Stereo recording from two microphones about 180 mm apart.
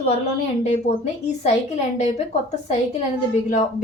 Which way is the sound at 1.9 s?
40° left (ahead or behind).